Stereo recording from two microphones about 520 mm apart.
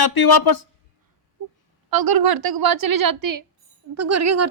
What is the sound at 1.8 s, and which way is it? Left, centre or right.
A woman's voice, right.